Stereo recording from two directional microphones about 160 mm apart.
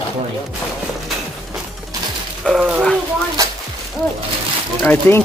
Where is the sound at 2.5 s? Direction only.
5° right (ahead or behind).